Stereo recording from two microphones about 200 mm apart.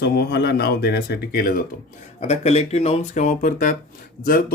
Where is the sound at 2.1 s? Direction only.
30° left (ahead or behind).